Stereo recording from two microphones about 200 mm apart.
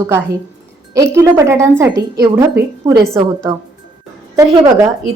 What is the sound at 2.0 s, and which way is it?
Speech, 55° right (ahead or behind).